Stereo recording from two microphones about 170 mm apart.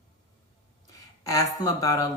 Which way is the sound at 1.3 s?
20° left (ahead or behind).